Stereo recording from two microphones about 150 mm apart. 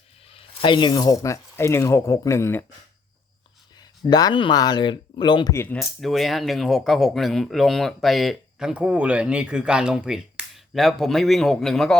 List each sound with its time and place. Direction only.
0.3 s speech: 35° left (ahead or behind); by 2.6 s 15° left (ahead or behind)
4.1 s speech: 30° left (ahead or behind)
5.5 s speech: 10° left (ahead or behind)
5.8 s speech: centre (ahead or behind)